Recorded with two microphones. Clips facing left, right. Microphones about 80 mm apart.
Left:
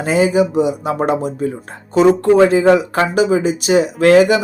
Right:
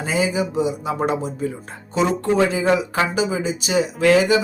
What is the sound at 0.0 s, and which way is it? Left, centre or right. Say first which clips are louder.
Speech: left 7 dB; left.